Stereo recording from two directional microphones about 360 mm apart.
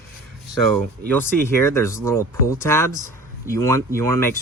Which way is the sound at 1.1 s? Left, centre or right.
Centre.